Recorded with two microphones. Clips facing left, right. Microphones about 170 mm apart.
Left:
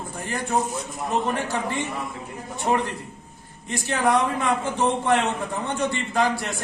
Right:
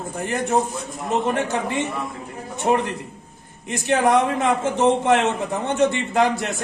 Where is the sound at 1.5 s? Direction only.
20° right (ahead or behind).